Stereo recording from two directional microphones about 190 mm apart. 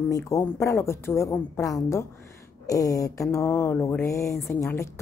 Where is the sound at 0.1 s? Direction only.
15° left (ahead or behind).